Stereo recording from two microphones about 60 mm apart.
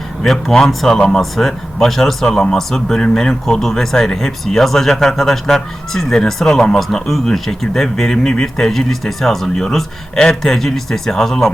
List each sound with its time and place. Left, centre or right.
0.2 s speech: centre